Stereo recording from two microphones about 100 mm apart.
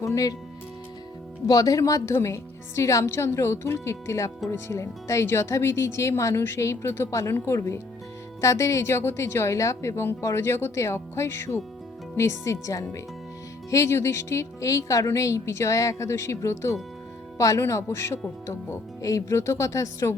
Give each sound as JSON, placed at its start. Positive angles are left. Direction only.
{"t": 0.0, "sound": "a woman's voice", "side_deg": 35}
{"t": 1.5, "sound": "a woman's voice", "side_deg": 35}